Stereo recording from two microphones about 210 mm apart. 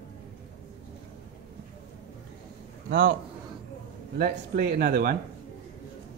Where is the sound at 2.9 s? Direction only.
60° right (ahead or behind).